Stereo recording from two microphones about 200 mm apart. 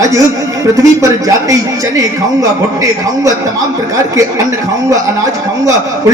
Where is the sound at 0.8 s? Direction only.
15° right (ahead or behind).